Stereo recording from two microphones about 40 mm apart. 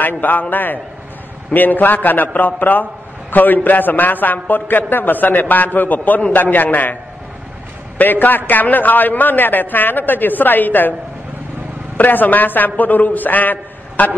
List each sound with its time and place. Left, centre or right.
0.0 s a man's voice: left
8.0 s a man's voice: left
12.0 s a man's voice: left